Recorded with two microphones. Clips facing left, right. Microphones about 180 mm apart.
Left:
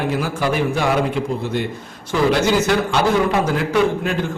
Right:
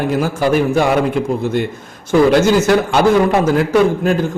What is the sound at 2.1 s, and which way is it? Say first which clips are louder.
A man's voice: right 6 dB; 45° right (ahead or behind).